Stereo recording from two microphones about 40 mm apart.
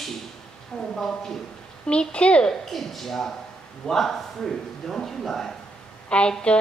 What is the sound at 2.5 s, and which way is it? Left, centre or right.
Speech, centre.